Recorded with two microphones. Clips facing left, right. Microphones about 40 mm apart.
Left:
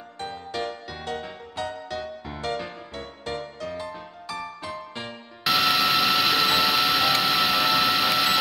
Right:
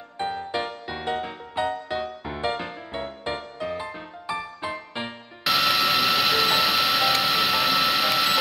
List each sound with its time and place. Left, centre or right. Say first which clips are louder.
0.2 s music: right 4 dB; right
5.4 s music: even; centre